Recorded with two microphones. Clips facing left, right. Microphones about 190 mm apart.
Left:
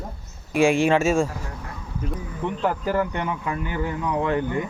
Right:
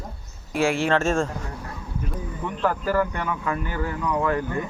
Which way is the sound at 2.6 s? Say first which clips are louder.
Right 1 dB; 20° left (ahead or behind).